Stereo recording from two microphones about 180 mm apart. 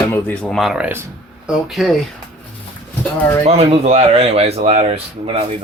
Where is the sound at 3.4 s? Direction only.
35° right (ahead or behind).